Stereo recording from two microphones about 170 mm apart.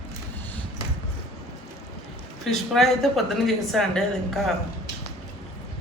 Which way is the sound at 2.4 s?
Centre (ahead or behind).